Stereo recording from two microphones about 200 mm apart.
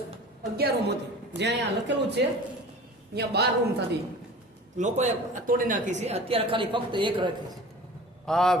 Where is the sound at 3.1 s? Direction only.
55° right (ahead or behind).